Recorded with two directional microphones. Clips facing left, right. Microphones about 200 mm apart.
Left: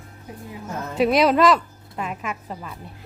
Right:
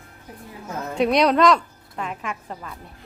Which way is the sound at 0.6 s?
Centre (ahead or behind).